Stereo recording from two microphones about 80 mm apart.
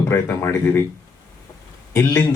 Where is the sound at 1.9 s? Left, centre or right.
Left.